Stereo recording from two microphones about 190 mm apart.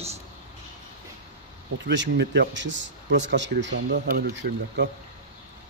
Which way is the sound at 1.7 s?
70° right (ahead or behind).